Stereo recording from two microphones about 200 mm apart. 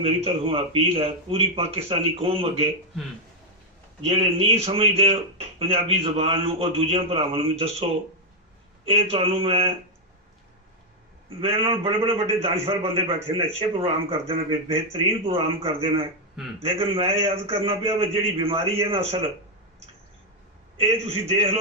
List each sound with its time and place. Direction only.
0.0 s speech: 25° right (ahead or behind)
4.0 s speech: 30° right (ahead or behind)
11.3 s speech: 30° right (ahead or behind)
20.7 s speech: 30° right (ahead or behind)